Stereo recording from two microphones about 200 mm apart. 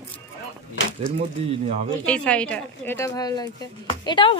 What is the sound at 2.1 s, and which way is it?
A woman's voice, 5° left (ahead or behind).